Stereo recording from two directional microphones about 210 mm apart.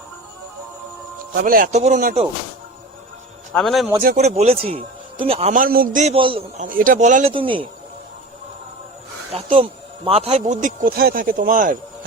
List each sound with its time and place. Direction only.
1.3 s a man's voice: 40° right (ahead or behind)
3.5 s a man's voice: centre (ahead or behind)
4.2 s a man's voice: 30° right (ahead or behind)
6.6 s a man's voice: 40° right (ahead or behind); by 7.7 s 25° right (ahead or behind)
9.3 s a man's voice: 25° right (ahead or behind)